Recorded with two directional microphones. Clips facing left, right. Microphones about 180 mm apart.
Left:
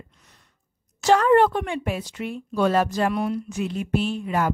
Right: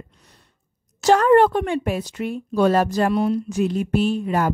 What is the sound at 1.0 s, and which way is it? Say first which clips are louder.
Speech: right 3 dB; 45° right (ahead or behind).